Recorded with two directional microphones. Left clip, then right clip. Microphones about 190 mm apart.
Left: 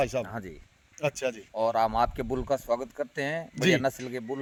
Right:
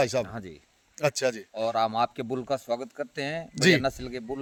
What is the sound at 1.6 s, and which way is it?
A man's voice, 10° right (ahead or behind).